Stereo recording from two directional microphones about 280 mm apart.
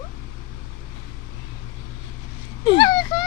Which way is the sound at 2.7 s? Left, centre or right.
Centre.